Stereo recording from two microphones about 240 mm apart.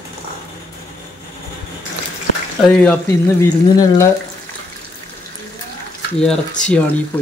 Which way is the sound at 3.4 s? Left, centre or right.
Centre.